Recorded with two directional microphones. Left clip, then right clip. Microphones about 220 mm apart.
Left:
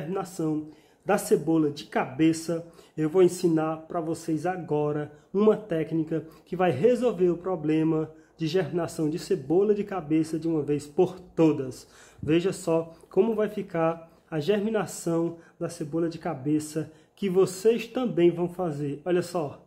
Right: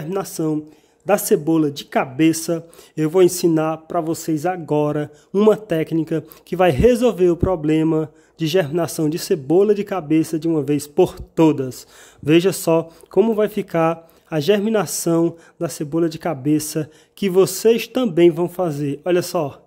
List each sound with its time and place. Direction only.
0.1 s speech: 45° right (ahead or behind)